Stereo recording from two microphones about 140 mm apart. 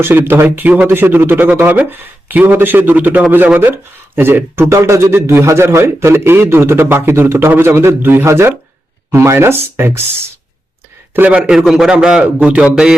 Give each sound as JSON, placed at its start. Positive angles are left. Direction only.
{"t": 0.0, "sound": "a man's voice", "side_deg": -15}